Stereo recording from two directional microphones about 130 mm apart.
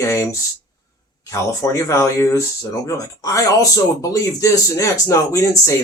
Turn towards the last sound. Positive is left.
turn(degrees=25)  # may be behind; listen again after turning